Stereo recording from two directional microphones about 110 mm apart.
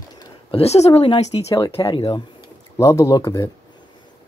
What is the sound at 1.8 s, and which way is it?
Speech, 40° left (ahead or behind).